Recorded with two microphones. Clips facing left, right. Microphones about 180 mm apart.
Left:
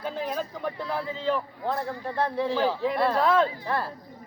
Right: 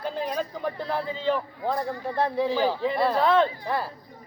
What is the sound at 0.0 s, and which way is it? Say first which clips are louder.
Speech: right 2 dB; 5° left (ahead or behind).